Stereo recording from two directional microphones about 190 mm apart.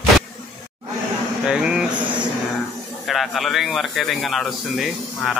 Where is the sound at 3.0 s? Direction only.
Centre (ahead or behind).